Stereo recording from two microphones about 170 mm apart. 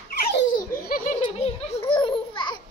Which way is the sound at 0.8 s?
60° left (ahead or behind).